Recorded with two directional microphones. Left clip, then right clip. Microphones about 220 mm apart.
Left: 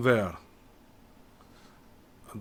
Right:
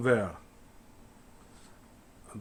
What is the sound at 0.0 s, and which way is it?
Speech, 30° left (ahead or behind).